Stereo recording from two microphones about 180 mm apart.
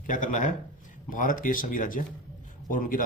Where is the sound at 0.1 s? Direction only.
45° left (ahead or behind).